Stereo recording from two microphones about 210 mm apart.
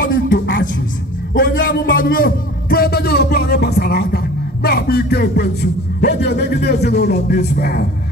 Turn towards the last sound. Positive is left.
turn(degrees=45)  # may be behind; listen again after turning